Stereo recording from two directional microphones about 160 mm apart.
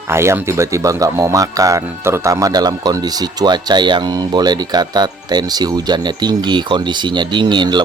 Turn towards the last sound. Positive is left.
turn(degrees=-30)  # may be behind; listen again after turning